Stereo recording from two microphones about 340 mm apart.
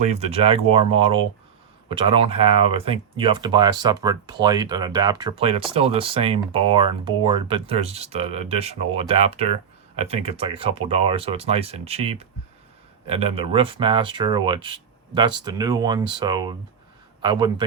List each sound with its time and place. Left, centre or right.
0.0 s speech: centre